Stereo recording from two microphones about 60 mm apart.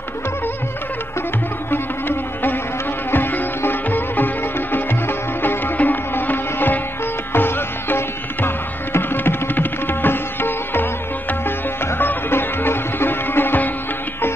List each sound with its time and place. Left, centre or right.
1.7 s music: left